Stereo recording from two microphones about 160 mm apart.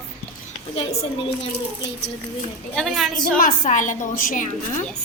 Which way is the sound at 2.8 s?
Centre (ahead or behind).